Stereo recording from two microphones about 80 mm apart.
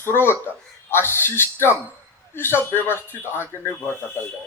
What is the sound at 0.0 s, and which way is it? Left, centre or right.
Speech, left.